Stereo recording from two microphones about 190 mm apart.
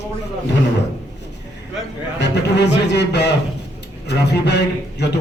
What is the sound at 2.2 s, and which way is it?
A man's voice, 65° left (ahead or behind).